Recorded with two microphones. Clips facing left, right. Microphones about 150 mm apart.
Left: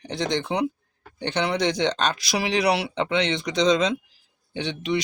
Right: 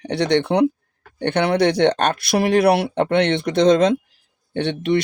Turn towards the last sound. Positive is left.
turn(degrees=-55)  # may be behind; listen again after turning